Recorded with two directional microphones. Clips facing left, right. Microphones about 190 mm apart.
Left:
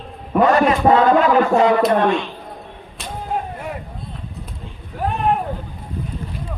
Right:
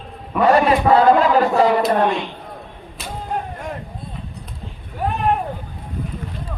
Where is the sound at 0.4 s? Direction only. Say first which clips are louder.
Right 1 dB; 30° right (ahead or behind).